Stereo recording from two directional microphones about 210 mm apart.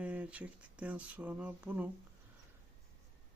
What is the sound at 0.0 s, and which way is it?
Speech, 5° right (ahead or behind).